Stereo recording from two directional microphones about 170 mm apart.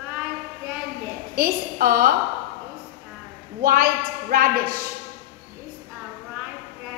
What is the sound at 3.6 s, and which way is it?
Speech, 55° right (ahead or behind).